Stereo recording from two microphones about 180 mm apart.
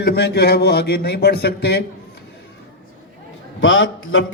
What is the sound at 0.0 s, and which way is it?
A man's voice, 65° left (ahead or behind).